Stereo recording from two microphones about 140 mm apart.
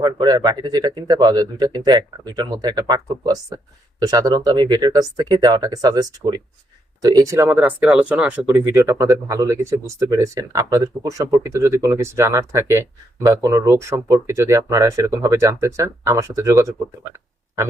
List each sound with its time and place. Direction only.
0.0 s speech: 30° right (ahead or behind)
7.6 s speech: 5° right (ahead or behind)